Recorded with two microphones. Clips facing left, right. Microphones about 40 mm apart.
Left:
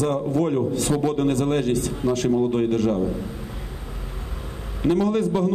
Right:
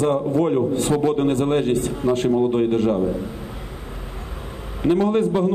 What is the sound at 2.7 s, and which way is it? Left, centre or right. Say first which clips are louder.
Speech: right 2 dB; right.